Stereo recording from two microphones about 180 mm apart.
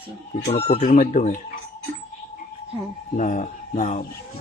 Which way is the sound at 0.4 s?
35° left (ahead or behind).